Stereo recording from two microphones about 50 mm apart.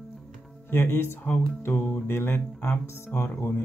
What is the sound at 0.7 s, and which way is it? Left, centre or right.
Speech, left.